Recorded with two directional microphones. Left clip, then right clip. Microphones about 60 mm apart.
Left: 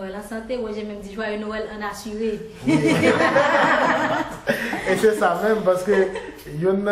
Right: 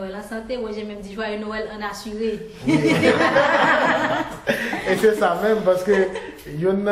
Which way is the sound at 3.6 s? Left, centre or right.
Left.